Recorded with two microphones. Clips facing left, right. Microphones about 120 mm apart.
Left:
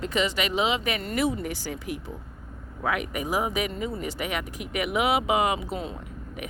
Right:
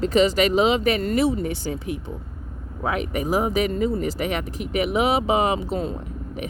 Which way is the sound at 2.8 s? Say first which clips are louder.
Right 3 dB; 35° right (ahead or behind).